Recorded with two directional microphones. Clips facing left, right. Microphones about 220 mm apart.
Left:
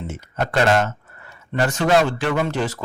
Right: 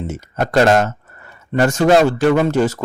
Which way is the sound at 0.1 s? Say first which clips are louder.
Right 5 dB; 40° right (ahead or behind).